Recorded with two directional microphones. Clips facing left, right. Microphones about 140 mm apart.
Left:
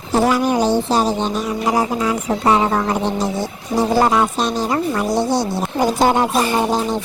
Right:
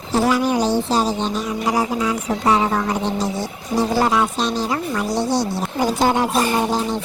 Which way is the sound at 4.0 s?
50° left (ahead or behind).